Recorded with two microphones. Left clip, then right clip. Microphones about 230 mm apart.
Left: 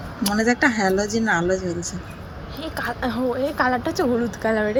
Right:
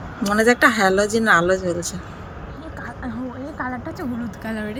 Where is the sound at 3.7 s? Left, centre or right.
Left.